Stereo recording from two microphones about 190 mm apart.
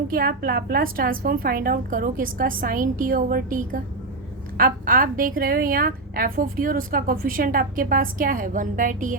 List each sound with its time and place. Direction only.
0.1 s a woman's voice: 50° right (ahead or behind)